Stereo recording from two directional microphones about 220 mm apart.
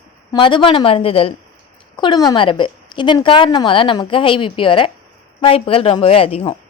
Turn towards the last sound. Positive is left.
turn(degrees=25)  # may be behind; listen again after turning